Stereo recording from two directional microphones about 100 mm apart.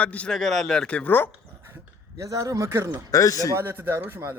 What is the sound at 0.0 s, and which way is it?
Speech, 10° left (ahead or behind).